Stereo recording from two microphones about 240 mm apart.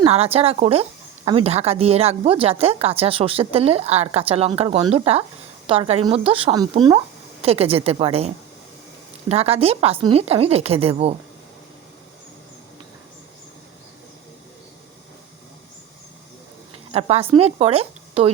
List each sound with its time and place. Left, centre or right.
0.0 s speech: right
9.3 s speech: right
16.9 s speech: right